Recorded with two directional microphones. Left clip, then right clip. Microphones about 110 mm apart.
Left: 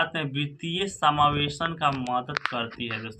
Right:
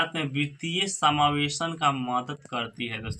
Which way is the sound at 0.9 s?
10° right (ahead or behind).